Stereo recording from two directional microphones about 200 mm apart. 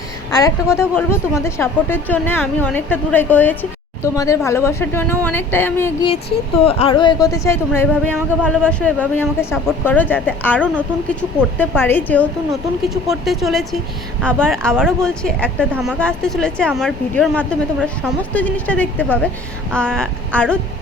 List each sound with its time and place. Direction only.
0.3 s a woman's voice: 20° left (ahead or behind)
6.7 s a woman's voice: 30° left (ahead or behind); by 15.6 s 5° left (ahead or behind)
15.7 s a woman's voice: 5° right (ahead or behind)